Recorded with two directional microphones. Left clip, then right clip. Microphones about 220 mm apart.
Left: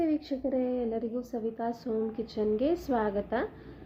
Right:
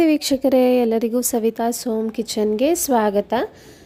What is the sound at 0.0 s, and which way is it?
A woman's voice, 55° right (ahead or behind).